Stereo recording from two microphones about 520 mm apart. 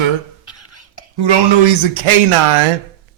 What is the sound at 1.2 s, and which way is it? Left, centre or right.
Speech, right.